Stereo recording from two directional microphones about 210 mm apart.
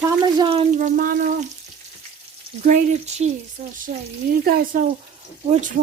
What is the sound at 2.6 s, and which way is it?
Speech, 35° right (ahead or behind).